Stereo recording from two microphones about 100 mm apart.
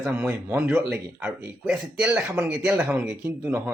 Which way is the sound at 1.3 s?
10° right (ahead or behind).